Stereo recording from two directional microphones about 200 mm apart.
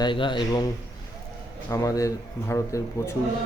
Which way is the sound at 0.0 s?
25° left (ahead or behind).